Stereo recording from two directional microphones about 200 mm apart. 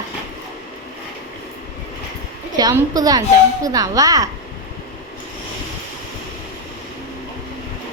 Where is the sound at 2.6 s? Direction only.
15° right (ahead or behind).